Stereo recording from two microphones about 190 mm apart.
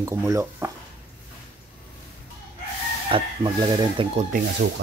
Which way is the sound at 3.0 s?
25° right (ahead or behind).